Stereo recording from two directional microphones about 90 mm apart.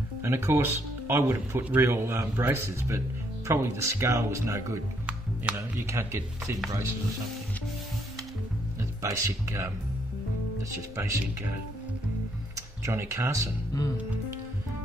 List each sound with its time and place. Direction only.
0.2 s speech: 30° right (ahead or behind)
5.0 s music: 15° right (ahead or behind)
5.6 s speech: 30° right (ahead or behind)
9.0 s speech: 35° right (ahead or behind)
11.0 s speech: 30° right (ahead or behind)